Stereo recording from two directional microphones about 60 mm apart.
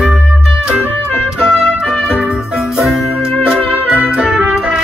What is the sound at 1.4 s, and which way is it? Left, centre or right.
Music, centre.